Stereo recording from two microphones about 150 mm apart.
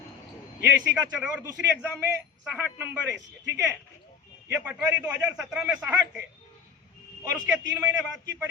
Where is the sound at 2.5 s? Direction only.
10° right (ahead or behind).